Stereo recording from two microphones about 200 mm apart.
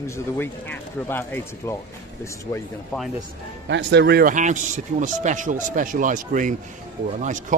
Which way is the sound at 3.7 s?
60° right (ahead or behind).